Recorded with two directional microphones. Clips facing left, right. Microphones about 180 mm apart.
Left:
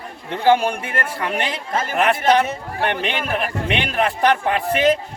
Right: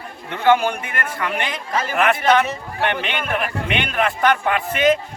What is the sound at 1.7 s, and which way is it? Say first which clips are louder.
Speech: right 1 dB; 50° left (ahead or behind).